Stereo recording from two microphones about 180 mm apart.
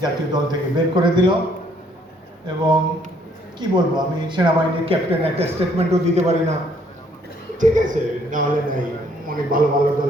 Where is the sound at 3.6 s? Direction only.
25° right (ahead or behind).